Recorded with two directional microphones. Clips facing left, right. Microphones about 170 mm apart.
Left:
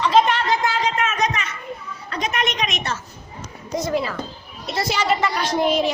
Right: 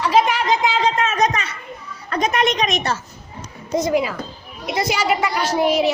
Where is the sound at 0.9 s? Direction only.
35° right (ahead or behind).